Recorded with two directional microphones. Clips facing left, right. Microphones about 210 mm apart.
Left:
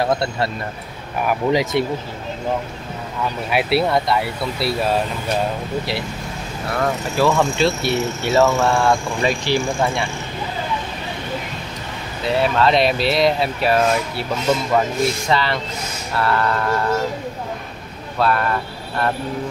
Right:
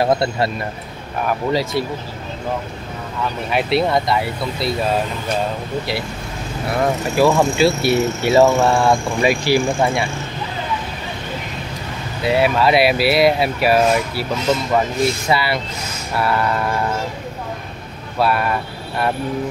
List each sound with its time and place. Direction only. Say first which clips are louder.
1.2 s speech: left 1 dB; 20° left (ahead or behind)
3.5 s speech: right 1 dB; 5° left (ahead or behind)
6.8 s speech: right 3 dB; 15° right (ahead or behind)
12.3 s speech: right 2 dB; 10° right (ahead or behind)
15.2 s speech: right 1 dB; 10° right (ahead or behind)
18.2 s speech: right 1 dB; 10° right (ahead or behind)